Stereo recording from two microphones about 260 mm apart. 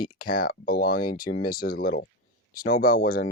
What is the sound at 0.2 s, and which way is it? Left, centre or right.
Speech, left.